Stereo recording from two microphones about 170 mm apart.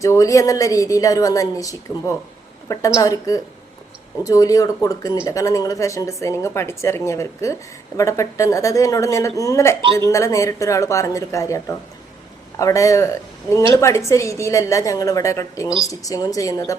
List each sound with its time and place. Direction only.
0.0 s a woman's voice: 20° left (ahead or behind)